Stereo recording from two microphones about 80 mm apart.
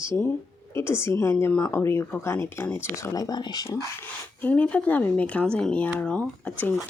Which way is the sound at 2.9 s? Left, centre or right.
Left.